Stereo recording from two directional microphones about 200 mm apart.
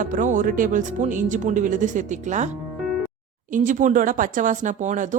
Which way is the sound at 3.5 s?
40° right (ahead or behind).